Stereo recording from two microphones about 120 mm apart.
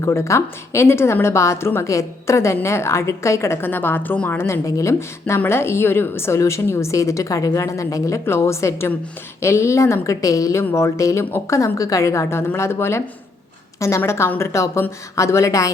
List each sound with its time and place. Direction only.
0.0 s a woman's voice: 25° left (ahead or behind)